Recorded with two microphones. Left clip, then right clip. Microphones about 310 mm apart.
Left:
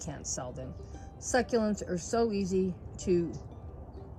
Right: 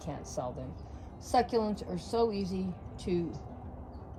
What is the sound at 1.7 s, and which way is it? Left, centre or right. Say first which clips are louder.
Speech: left 3 dB; centre.